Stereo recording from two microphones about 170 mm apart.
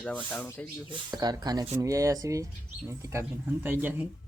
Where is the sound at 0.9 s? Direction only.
25° right (ahead or behind).